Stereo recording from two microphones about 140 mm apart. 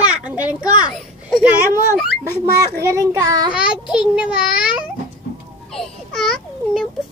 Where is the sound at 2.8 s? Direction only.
20° right (ahead or behind).